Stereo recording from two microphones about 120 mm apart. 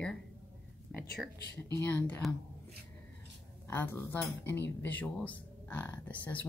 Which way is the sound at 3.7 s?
20° left (ahead or behind).